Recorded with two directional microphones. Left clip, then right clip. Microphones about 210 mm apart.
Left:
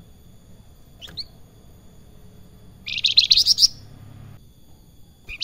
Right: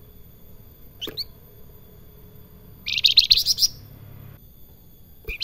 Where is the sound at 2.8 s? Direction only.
25° right (ahead or behind).